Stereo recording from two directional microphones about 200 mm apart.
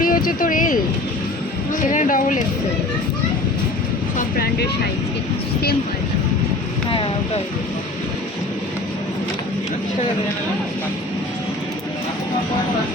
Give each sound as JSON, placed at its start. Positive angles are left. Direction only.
{"t": 0.0, "sound": "speech", "side_deg": 45}
{"t": 1.9, "sound": "speech", "side_deg": 40}
{"t": 4.2, "sound": "speech", "side_deg": 50}